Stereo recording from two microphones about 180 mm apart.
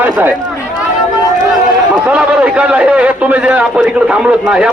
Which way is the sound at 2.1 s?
5° right (ahead or behind).